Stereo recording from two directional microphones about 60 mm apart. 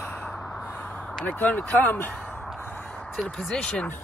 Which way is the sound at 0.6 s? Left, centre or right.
Left.